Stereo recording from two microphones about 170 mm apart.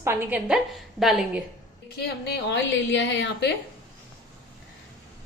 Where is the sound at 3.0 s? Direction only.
85° left.